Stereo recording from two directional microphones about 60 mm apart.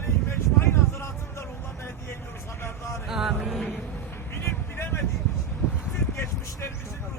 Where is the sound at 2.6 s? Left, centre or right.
Left.